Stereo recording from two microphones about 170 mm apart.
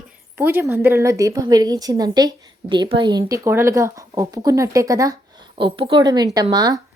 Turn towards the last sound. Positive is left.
turn(degrees=-25)  # may be behind; listen again after turning